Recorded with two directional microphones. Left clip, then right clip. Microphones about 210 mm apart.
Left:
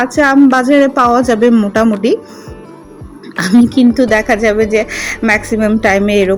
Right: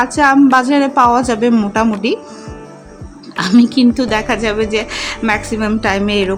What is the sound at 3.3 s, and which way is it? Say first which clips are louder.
A woman's voice: left 2 dB; 5° left (ahead or behind).